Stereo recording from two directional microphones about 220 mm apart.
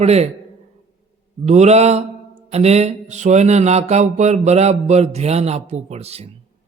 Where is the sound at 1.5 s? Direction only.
30° right (ahead or behind).